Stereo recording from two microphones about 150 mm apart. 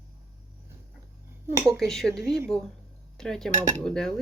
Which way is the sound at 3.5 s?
55° right (ahead or behind).